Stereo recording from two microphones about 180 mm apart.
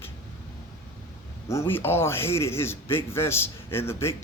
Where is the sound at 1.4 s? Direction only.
15° left (ahead or behind).